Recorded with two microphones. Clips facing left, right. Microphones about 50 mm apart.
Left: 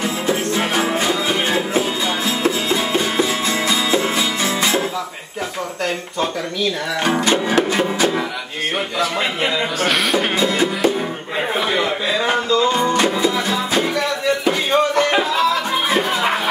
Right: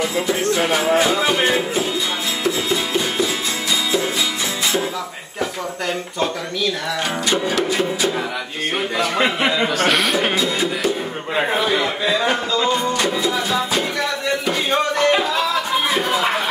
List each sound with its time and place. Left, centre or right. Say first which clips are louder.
2.4 s music: left 1 dB; left
7.2 s music: even; left
9.8 s speech: left 2 dB; centre
12.9 s music: left 3 dB; left